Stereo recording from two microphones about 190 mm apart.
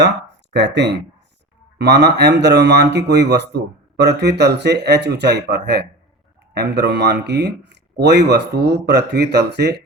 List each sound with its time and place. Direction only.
0.5 s speech: 65° right (ahead or behind)